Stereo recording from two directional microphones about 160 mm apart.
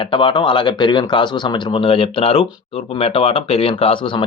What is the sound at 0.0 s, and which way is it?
Speech, 30° left (ahead or behind).